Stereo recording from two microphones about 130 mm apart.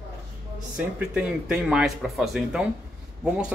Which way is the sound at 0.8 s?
10° right (ahead or behind).